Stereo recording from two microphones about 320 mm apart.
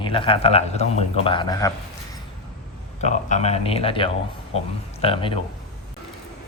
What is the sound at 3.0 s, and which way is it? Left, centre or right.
Speech, left.